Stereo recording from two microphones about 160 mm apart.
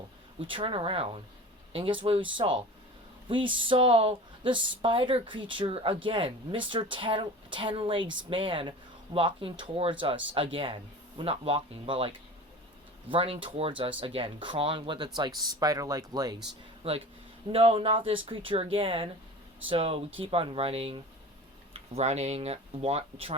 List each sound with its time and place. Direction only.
0.3 s speech: 35° right (ahead or behind)
16.8 s speech: 35° right (ahead or behind)